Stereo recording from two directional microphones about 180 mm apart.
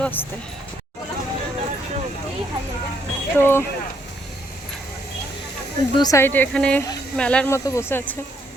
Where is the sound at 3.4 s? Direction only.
10° left (ahead or behind).